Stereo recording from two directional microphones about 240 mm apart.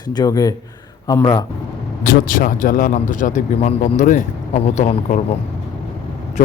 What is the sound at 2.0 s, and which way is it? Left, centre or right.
Speech, left.